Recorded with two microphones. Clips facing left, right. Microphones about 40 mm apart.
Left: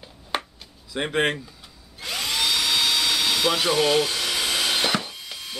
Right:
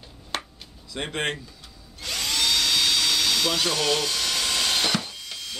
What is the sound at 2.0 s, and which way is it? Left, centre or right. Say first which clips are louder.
Drill: left 1 dB; centre.